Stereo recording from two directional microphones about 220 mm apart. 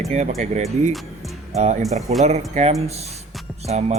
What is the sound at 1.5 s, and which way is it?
Speech, 30° right (ahead or behind).